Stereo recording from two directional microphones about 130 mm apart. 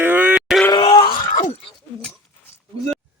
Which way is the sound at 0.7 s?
40° left (ahead or behind).